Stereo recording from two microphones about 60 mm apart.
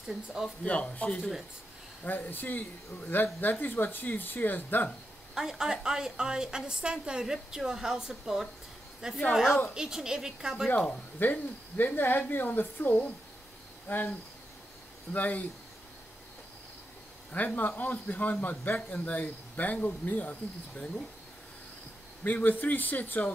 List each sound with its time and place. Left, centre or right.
0.0 s speech: centre
0.7 s speech: left
2.0 s speech: left
5.3 s a woman's voice: centre
10.9 s speech: left
15.1 s speech: left
17.6 s speech: left
22.2 s speech: left